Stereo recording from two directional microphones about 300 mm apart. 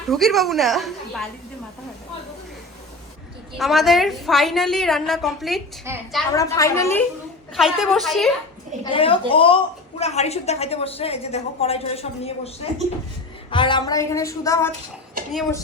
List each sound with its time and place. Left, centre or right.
0.1 s a woman's voice: centre
3.6 s a woman's voice: centre
6.3 s a woman's voice: centre
8.8 s a woman's voice: centre
13.5 s speech: centre